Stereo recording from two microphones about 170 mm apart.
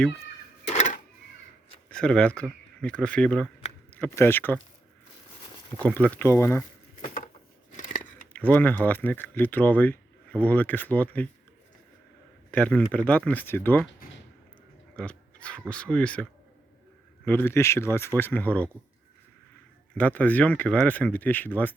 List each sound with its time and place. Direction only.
0.7 s a sound: 40° left (ahead or behind)
1.9 s speech: 5° left (ahead or behind)
5.8 s speech: 10° left (ahead or behind)
7.0 s a sound: 50° left (ahead or behind)
7.7 s scissors: 50° left (ahead or behind)
8.3 s speech: 10° left (ahead or behind)
12.5 s speech: 5° left (ahead or behind)
14.9 s dog: 5° left (ahead or behind)
15.7 s speech: 5° left (ahead or behind)
17.2 s speech: 10° left (ahead or behind)
19.9 s speech: 10° left (ahead or behind)